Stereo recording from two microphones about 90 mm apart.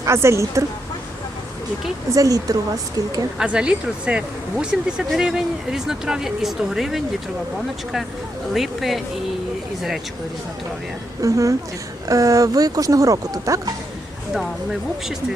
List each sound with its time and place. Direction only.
0.0 s speech: 30° right (ahead or behind)
2.1 s speech: 40° right (ahead or behind)
3.3 s speech: 10° right (ahead or behind)
8.5 s speech: centre (ahead or behind)
11.2 s speech: 35° right (ahead or behind)
14.3 s speech: 5° right (ahead or behind)